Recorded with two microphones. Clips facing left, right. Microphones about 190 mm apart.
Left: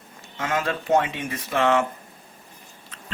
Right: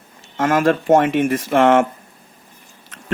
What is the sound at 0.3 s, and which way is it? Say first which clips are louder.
Speech: right 10 dB; 50° right (ahead or behind).